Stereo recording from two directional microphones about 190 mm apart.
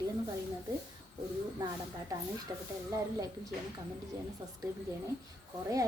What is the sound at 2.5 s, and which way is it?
Speech, 15° right (ahead or behind).